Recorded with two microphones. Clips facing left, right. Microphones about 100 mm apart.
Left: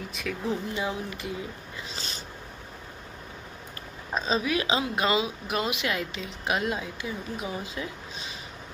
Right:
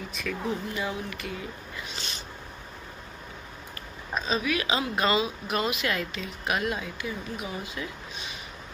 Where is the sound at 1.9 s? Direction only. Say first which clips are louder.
Even; 35° left (ahead or behind).